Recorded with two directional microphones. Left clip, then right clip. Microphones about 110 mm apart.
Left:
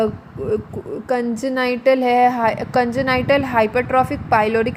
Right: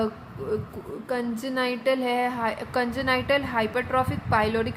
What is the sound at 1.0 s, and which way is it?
A woman's voice, 40° left (ahead or behind).